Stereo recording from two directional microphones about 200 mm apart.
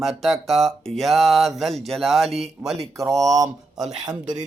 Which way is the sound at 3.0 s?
15° right (ahead or behind).